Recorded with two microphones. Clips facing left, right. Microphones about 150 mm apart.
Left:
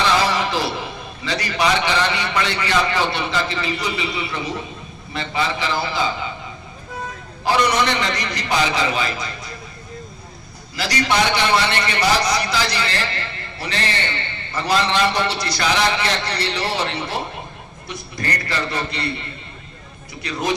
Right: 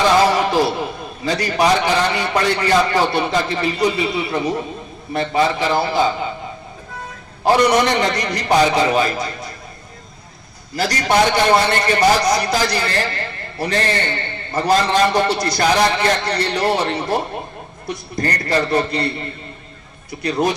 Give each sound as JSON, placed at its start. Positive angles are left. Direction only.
{"t": 0.3, "sound": "a man's voice", "side_deg": -50}
{"t": 7.4, "sound": "a man's voice", "side_deg": -50}
{"t": 10.8, "sound": "a man's voice", "side_deg": -45}